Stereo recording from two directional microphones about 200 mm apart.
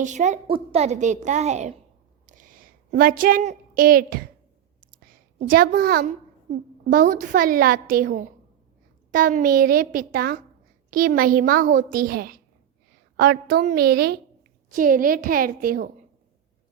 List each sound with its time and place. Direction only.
0.0 s a woman's voice: 35° right (ahead or behind)
2.2 s a sound: 40° right (ahead or behind)
5.4 s a child's voice: 50° right (ahead or behind)